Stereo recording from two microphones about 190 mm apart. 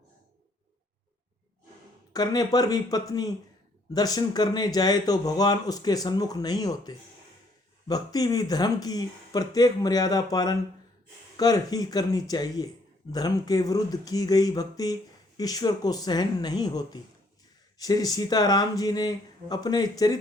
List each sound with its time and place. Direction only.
2.1 s a man's voice: 20° left (ahead or behind)